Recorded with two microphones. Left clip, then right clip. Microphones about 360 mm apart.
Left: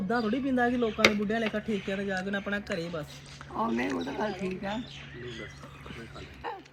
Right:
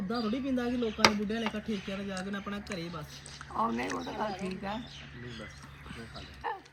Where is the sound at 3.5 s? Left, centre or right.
Right.